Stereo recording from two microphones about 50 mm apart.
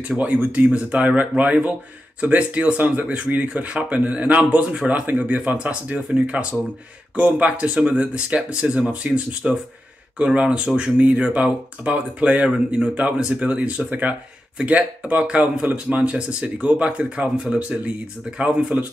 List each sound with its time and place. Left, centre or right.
0.2 s speech: right
10.4 s speech: centre
11.0 s speech: right